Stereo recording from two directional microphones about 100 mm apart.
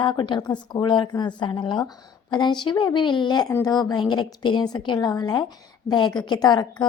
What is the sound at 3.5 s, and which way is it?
A woman's voice, 35° left (ahead or behind).